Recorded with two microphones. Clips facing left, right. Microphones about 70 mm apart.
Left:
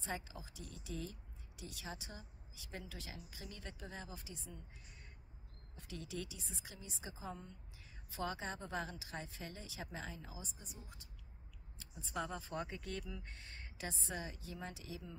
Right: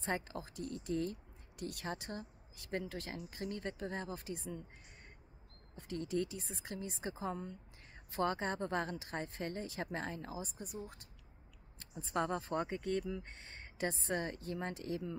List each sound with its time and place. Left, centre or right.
0.0 s speech: right
5.8 s speech: right
13.5 s a sound: right
13.8 s speech: right